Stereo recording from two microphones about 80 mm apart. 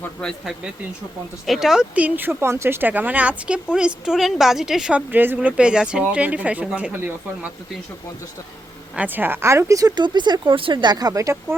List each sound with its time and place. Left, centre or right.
1.5 s speech: centre
2.0 s a woman's voice: right
4.9 s a woman's voice: right
9.0 s a woman's voice: right
9.9 s speech: right
10.9 s speech: right